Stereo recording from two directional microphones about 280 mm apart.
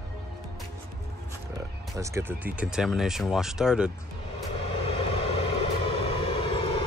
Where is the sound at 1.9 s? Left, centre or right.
Centre.